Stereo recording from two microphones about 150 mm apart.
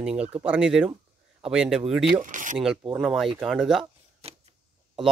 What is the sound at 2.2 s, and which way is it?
Speech, 60° right (ahead or behind).